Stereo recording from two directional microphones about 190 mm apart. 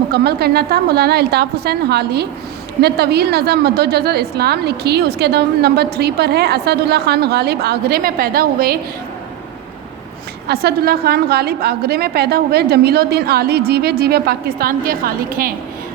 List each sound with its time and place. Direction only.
0.1 s a woman's voice: 55° right (ahead or behind)
10.5 s a woman's voice: 55° right (ahead or behind)